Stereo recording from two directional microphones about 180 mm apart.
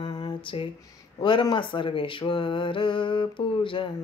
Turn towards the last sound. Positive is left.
turn(degrees=25)  # may be behind; listen again after turning